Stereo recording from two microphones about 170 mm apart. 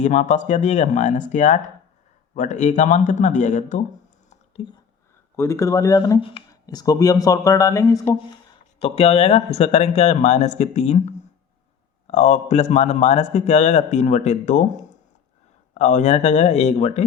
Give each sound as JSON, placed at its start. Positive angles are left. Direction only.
{"t": 0.0, "sound": "speech", "side_deg": 45}
{"t": 4.3, "sound": "whispering", "side_deg": 35}
{"t": 5.4, "sound": "speech", "side_deg": 15}
{"t": 8.8, "sound": "a man's voice", "side_deg": 35}